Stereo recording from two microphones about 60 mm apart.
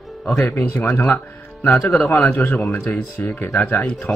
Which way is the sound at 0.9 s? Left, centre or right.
Left.